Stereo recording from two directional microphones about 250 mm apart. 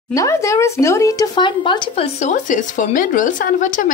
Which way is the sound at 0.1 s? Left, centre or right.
Centre.